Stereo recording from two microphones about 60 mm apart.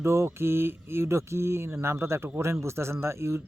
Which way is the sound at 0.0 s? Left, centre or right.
Right.